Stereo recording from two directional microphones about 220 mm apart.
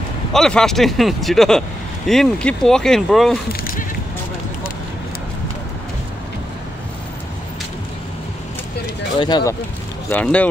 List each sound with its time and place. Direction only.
0.3 s speech: centre (ahead or behind)
9.2 s speech: 15° left (ahead or behind)
10.0 s speech: 5° left (ahead or behind)